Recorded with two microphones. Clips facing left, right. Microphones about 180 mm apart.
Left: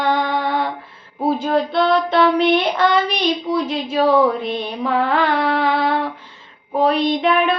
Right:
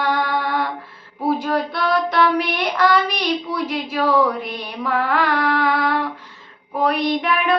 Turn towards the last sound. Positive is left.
turn(degrees=25)  # may be behind; listen again after turning